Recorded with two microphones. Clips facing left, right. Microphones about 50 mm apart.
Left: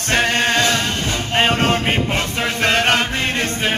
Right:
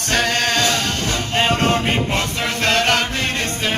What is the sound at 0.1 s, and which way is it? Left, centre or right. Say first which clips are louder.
Music: left 2 dB; left.